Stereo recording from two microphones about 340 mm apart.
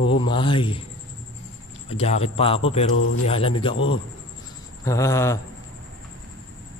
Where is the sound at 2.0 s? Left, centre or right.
Centre.